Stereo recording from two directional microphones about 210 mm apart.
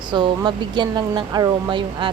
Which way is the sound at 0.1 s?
20° right (ahead or behind).